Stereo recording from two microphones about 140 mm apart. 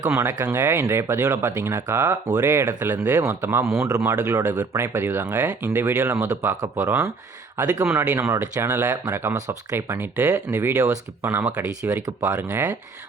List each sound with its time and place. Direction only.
0.2 s speech: 15° right (ahead or behind)
7.5 s a man's voice: 10° right (ahead or behind)